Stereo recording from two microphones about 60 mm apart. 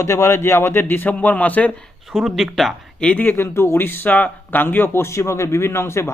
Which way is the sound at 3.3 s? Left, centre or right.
Left.